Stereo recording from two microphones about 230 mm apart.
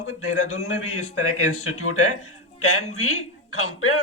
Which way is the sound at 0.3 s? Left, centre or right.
Left.